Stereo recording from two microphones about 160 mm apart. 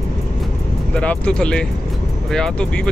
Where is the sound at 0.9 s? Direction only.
5° left (ahead or behind).